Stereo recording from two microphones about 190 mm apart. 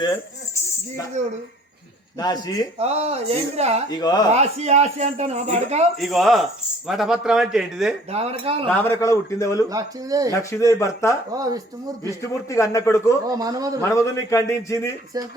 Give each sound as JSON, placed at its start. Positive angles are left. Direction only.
{"t": 0.0, "sound": "speech", "side_deg": 15}
{"t": 2.1, "sound": "a man's voice", "side_deg": 20}
{"t": 2.7, "sound": "a man's voice", "side_deg": -35}
{"t": 3.8, "sound": "a man's voice", "side_deg": 20}
{"t": 4.3, "sound": "a man's voice", "side_deg": -35}
{"t": 6.0, "sound": "speech", "side_deg": 0}
{"t": 8.1, "sound": "a man's voice", "side_deg": -30}
{"t": 8.6, "sound": "a man's voice", "side_deg": 10}
{"t": 9.6, "sound": "speech", "side_deg": -20}
{"t": 10.5, "sound": "a man's voice", "side_deg": 15}
{"t": 11.3, "sound": "speech", "side_deg": -20}
{"t": 12.2, "sound": "a man's voice", "side_deg": 15}
{"t": 13.2, "sound": "speech", "side_deg": -20}
{"t": 13.8, "sound": "a man's voice", "side_deg": 15}